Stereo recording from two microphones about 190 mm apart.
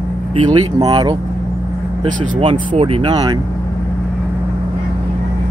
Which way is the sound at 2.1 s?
35° right (ahead or behind).